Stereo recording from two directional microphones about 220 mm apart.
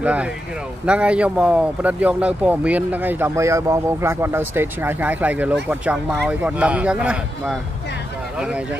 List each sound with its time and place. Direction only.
0.0 s speech: 5° right (ahead or behind)